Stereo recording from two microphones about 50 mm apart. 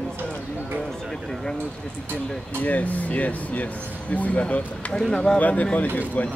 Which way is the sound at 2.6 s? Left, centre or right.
Left.